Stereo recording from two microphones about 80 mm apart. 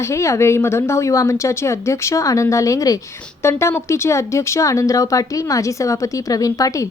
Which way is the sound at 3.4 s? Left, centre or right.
Left.